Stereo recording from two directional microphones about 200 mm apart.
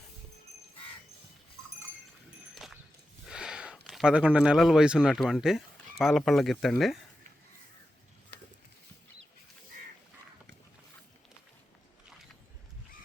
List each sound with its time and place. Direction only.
2.6 s walk: 5° right (ahead or behind)
3.2 s speech: 5° right (ahead or behind)
8.3 s a sound: 60° right (ahead or behind)